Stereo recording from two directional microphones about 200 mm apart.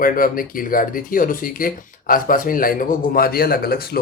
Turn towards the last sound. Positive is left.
turn(degrees=50)  # may be behind; listen again after turning